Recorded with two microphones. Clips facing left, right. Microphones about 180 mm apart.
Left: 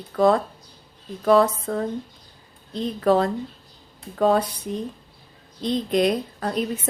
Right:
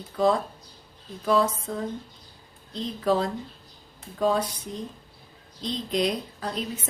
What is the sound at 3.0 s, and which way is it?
A woman's voice, 60° left (ahead or behind).